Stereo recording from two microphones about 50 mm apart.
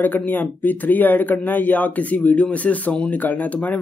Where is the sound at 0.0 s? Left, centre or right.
Left.